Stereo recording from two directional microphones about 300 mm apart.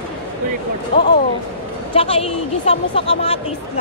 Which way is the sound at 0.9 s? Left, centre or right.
Centre.